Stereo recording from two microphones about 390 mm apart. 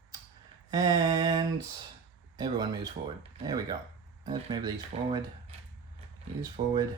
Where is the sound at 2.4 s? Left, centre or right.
Centre.